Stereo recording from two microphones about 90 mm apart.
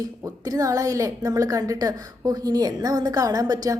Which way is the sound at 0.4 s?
40° right (ahead or behind).